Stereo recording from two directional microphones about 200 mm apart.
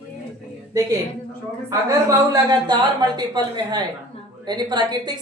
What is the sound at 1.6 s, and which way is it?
A woman's voice, 20° right (ahead or behind).